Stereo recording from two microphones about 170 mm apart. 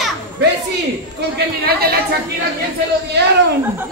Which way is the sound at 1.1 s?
65° right (ahead or behind).